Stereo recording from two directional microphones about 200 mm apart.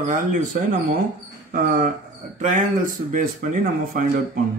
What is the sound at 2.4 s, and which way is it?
Speech, 40° right (ahead or behind).